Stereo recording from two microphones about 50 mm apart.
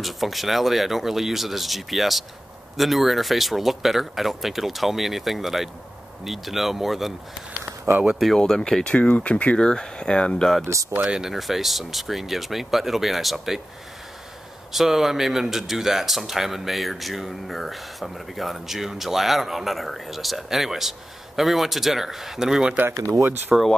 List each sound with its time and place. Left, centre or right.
0.0 s speech: centre
8.4 s speech: centre
8.9 s speech: left
11.1 s speech: centre
14.7 s speech: centre